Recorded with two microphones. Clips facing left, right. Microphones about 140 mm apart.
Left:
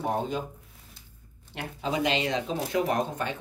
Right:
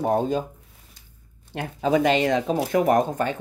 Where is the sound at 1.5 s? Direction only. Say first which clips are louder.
Right 8 dB; 50° right (ahead or behind).